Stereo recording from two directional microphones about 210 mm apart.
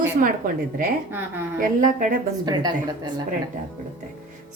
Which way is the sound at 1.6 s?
40° right (ahead or behind).